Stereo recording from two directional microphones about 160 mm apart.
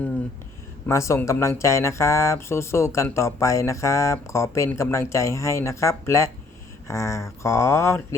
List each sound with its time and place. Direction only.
0.9 s speech: 20° left (ahead or behind)